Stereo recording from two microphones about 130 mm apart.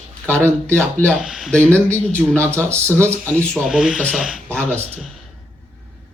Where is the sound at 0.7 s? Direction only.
10° left (ahead or behind).